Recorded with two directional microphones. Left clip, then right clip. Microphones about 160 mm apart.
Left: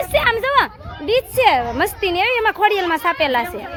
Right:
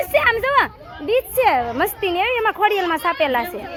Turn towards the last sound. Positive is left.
turn(degrees=25)  # may be behind; listen again after turning